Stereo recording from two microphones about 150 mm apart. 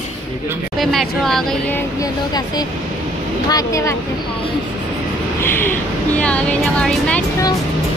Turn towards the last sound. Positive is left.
turn(degrees=5)  # may be behind; listen again after turning